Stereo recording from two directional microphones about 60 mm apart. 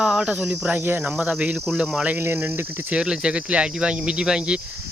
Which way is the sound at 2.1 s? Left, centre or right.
Right.